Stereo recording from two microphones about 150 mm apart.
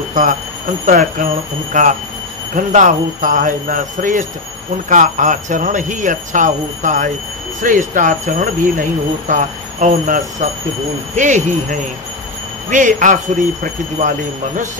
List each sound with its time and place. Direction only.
0.1 s speech: 65° right (ahead or behind)